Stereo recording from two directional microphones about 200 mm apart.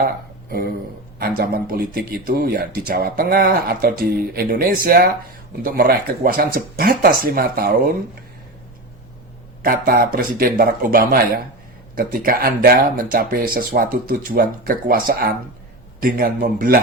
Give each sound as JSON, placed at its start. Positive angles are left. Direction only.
{"t": 1.2, "sound": "speech", "side_deg": -50}
{"t": 9.6, "sound": "speech", "side_deg": -45}